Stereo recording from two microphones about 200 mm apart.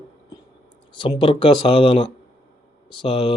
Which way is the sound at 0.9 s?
25° left (ahead or behind).